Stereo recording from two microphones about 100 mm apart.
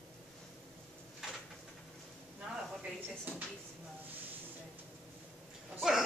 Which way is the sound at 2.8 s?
15° right (ahead or behind).